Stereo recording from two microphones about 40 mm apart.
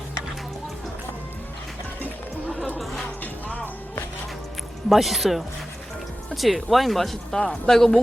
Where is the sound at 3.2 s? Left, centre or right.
Left.